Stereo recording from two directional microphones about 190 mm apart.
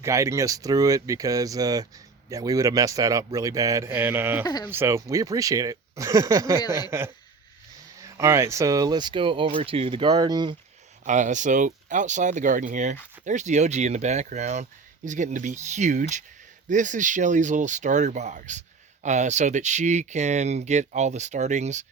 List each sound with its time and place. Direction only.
0.0 s a man's voice: 15° right (ahead or behind)
4.4 s speech: 20° left (ahead or behind)
4.7 s a man's voice: 15° right (ahead or behind)
6.6 s speech: 20° left (ahead or behind)
8.0 s speech: 15° right (ahead or behind)
11.0 s speech: 40° right (ahead or behind)